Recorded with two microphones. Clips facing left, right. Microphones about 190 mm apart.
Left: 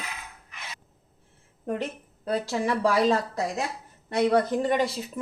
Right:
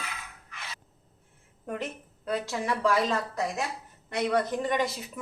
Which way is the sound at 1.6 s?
35° left (ahead or behind).